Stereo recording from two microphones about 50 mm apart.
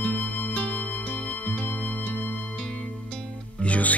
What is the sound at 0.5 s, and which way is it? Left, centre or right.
Music, left.